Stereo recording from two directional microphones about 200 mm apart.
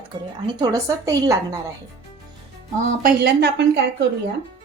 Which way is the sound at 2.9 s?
50° right (ahead or behind).